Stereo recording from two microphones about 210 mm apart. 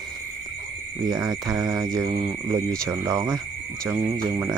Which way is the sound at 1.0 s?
20° right (ahead or behind).